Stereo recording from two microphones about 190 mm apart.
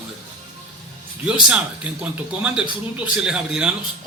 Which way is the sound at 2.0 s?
5° right (ahead or behind).